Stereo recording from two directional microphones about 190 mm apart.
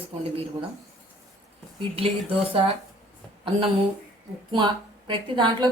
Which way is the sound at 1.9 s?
30° right (ahead or behind).